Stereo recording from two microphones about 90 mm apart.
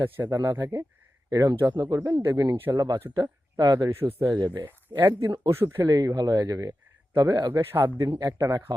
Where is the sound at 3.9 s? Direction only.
25° right (ahead or behind).